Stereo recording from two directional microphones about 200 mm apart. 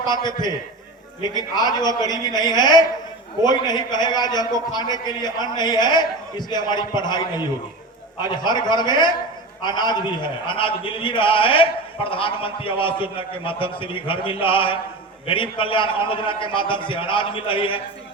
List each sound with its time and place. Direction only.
0.0 s a man's voice: 20° left (ahead or behind)